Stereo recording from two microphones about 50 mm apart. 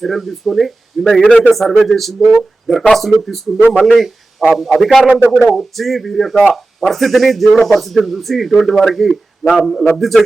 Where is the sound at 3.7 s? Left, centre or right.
Centre.